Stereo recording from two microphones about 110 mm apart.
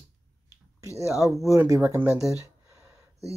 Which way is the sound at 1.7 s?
25° right (ahead or behind).